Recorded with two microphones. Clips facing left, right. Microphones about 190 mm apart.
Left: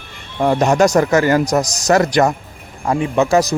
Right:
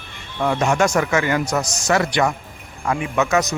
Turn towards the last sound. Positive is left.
turn(degrees=35)  # may be behind; listen again after turning